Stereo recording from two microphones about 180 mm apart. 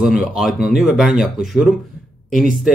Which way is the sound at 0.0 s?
5° right (ahead or behind).